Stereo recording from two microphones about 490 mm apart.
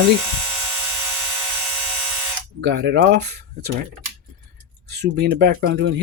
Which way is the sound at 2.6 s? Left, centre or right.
Right.